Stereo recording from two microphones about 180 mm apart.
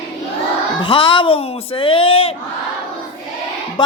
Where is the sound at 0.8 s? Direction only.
30° left (ahead or behind).